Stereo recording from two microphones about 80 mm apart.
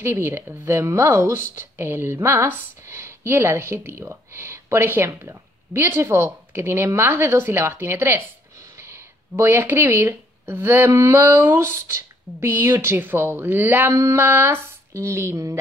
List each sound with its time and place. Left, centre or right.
0.0 s speech: right
13.9 s speech: right